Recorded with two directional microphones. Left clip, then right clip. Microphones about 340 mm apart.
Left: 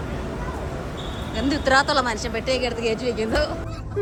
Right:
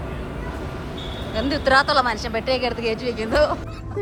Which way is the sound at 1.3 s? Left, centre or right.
Centre.